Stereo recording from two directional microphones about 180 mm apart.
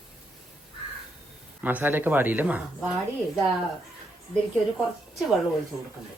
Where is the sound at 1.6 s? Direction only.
10° right (ahead or behind).